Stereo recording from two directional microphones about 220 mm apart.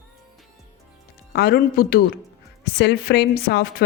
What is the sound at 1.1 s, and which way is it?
Speech, 45° left (ahead or behind).